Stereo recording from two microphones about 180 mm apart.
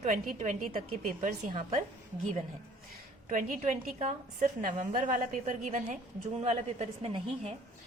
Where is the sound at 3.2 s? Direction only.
50° right (ahead or behind).